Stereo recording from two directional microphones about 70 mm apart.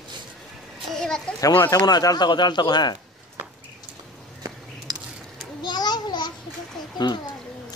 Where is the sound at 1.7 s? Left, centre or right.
Left.